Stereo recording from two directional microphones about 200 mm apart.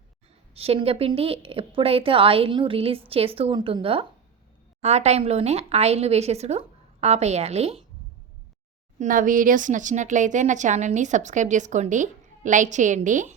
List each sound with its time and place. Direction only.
0.5 s a woman's voice: 30° right (ahead or behind)
9.0 s speech: 40° right (ahead or behind)